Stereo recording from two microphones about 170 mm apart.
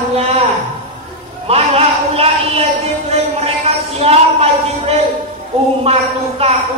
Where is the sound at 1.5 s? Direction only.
35° right (ahead or behind).